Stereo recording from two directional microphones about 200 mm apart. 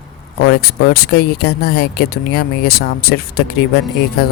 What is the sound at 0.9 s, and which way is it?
Speech, 50° left (ahead or behind).